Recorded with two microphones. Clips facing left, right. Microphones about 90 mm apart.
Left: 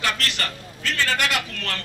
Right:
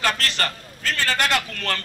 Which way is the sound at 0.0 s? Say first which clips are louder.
Right 3 dB; 40° right (ahead or behind).